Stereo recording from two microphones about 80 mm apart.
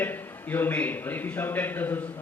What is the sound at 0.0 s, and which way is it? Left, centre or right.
A man's voice, left.